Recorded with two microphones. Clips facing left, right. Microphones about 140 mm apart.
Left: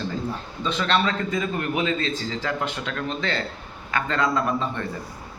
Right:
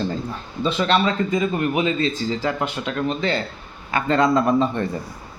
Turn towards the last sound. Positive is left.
turn(degrees=-20)  # may be behind; listen again after turning